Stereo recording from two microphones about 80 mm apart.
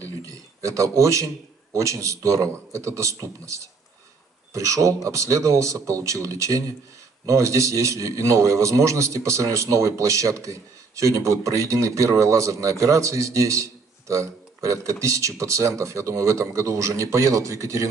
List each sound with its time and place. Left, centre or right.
0.0 s a man's voice: right